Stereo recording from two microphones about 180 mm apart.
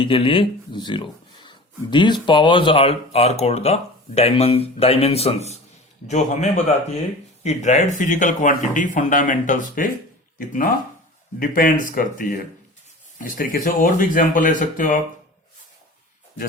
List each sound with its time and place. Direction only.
0.0 s speech: 30° left (ahead or behind); by 15.0 s 45° left (ahead or behind)